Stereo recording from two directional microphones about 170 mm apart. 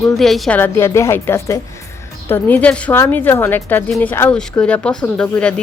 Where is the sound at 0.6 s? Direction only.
15° left (ahead or behind).